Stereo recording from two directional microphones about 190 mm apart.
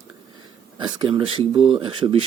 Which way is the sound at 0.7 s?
25° right (ahead or behind).